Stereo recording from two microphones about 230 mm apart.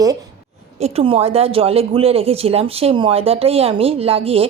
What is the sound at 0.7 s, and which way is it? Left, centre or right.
Speech, right.